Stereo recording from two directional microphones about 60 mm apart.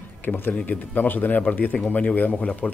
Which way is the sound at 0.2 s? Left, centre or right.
Left.